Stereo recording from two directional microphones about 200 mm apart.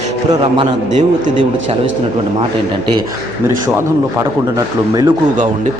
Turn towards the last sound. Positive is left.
turn(degrees=-20)  # may be behind; listen again after turning